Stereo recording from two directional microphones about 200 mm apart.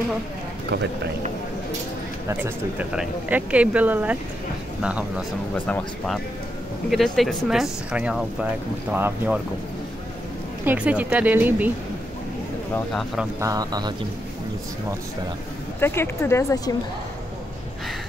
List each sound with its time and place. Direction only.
2.2 s speech: 10° right (ahead or behind)
10.6 s speech: 10° right (ahead or behind)
12.7 s speech: centre (ahead or behind)
13.4 s speech: 20° right (ahead or behind)
15.8 s speech: 10° left (ahead or behind)